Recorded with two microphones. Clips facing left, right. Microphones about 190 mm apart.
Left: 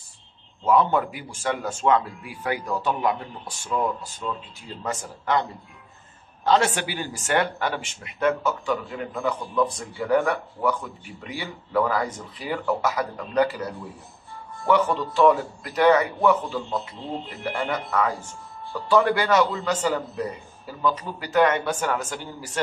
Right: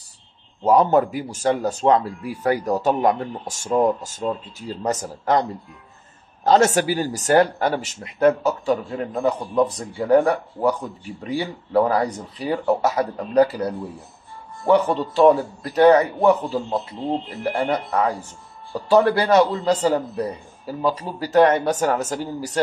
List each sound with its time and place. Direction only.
0.7 s speech: 40° right (ahead or behind)